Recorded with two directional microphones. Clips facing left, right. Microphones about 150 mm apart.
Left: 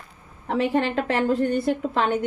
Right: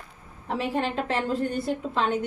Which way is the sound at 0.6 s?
60° left (ahead or behind).